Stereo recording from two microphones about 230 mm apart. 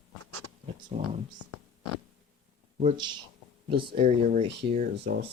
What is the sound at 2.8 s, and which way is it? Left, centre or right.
Speech, right.